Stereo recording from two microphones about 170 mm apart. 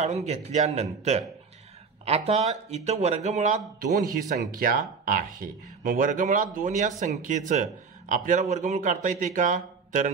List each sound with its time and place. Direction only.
0.0 s a man's voice: 40° right (ahead or behind)